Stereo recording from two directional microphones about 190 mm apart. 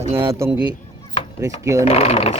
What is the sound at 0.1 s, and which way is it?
Speech, 10° right (ahead or behind).